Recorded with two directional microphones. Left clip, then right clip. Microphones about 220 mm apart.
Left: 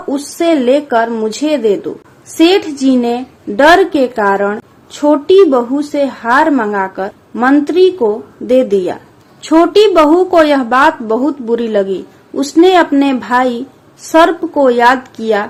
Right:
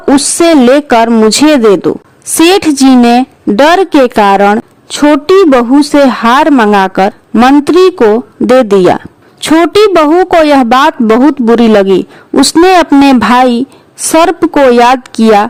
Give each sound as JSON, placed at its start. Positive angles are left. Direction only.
{"t": 0.4, "sound": "a woman's voice", "side_deg": -50}